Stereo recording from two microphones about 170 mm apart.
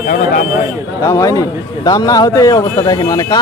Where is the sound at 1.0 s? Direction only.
20° left (ahead or behind).